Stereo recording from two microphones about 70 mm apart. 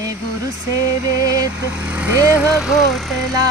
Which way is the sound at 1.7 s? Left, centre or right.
Right.